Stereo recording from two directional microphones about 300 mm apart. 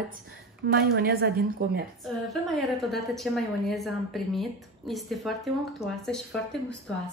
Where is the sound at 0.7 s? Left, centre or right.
Right.